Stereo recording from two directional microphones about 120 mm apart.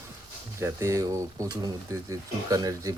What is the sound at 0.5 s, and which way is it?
Speech, 25° right (ahead or behind).